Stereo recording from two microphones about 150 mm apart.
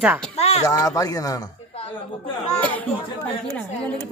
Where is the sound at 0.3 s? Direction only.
45° left (ahead or behind).